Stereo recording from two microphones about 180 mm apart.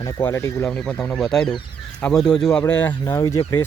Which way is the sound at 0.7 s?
5° left (ahead or behind).